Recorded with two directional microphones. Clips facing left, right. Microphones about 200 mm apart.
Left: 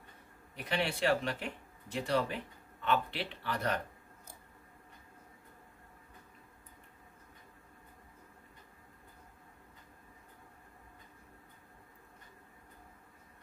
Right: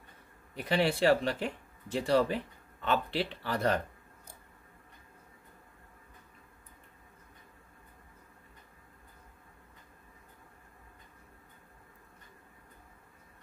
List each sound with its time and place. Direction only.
0.7 s speech: 30° right (ahead or behind)